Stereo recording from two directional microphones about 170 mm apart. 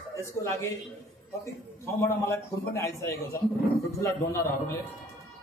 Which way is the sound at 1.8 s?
15° left (ahead or behind).